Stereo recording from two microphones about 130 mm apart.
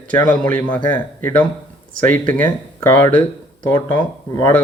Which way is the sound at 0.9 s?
15° left (ahead or behind).